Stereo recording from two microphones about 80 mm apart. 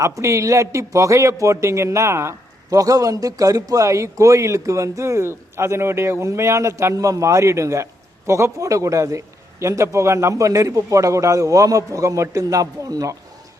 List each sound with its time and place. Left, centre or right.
0.0 s a man's voice: right
2.6 s a man's voice: right